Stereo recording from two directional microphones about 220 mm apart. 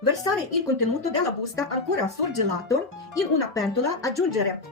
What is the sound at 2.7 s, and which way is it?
Speech, 15° left (ahead or behind).